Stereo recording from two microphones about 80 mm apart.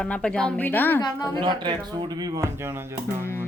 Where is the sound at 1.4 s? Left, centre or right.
Right.